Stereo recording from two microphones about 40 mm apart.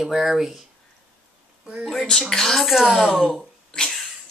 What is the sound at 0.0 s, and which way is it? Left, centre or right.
Speech, centre.